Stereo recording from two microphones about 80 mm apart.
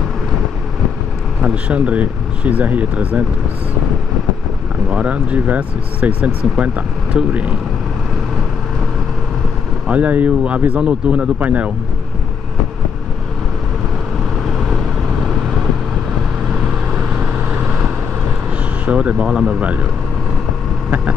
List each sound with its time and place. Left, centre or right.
1.4 s speech: centre
4.9 s speech: centre
9.8 s speech: centre
18.9 s speech: centre